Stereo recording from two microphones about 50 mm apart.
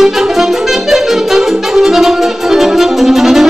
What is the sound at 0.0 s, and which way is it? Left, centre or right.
Saxophone, centre.